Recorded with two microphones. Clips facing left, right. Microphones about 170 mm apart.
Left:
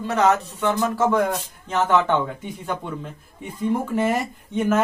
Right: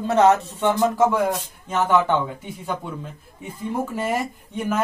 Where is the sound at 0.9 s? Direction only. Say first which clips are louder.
Right 1 dB; 10° right (ahead or behind).